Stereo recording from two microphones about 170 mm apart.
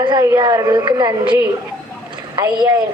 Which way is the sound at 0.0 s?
20° right (ahead or behind).